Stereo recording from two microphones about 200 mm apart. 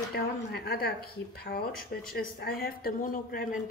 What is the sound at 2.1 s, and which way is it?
Speech, 50° left (ahead or behind).